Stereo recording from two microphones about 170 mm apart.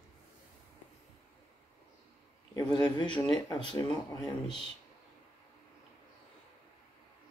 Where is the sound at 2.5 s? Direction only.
25° left (ahead or behind).